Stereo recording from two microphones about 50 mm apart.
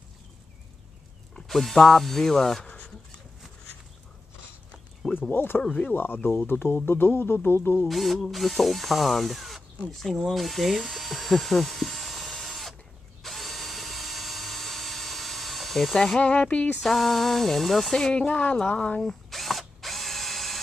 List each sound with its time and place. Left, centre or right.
1.3 s speech: centre
5.3 s speech: left
7.9 s speech: centre
9.8 s drill: centre
16.2 s speech: left
16.8 s speech: centre
17.9 s speech: centre
19.3 s drill: centre